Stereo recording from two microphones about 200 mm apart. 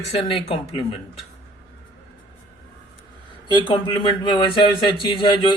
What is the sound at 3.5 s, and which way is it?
Speech, 25° left (ahead or behind).